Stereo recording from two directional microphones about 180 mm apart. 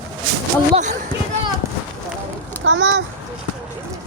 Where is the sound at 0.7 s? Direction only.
40° right (ahead or behind).